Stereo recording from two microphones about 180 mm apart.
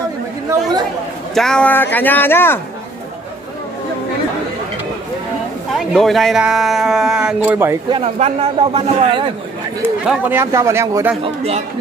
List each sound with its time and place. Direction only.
0.5 s speech: 20° right (ahead or behind)
1.3 s speech: 5° left (ahead or behind)
5.8 s speech: centre (ahead or behind)
7.9 s a man's voice: 35° right (ahead or behind)
10.0 s speech: 10° right (ahead or behind)
11.2 s a man's voice: 35° right (ahead or behind)